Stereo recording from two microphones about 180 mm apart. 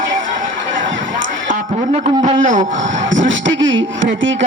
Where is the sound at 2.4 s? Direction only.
45° right (ahead or behind).